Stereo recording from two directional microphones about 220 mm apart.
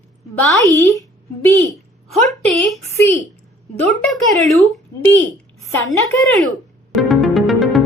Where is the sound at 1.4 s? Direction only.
10° left (ahead or behind).